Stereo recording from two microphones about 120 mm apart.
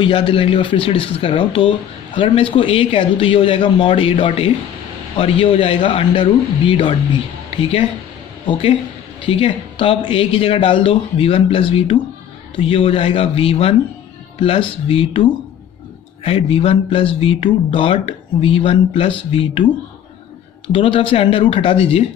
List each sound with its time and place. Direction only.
0.0 s speech: 45° left (ahead or behind)
8.5 s speech: 45° left (ahead or behind)
16.3 s speech: 55° left (ahead or behind)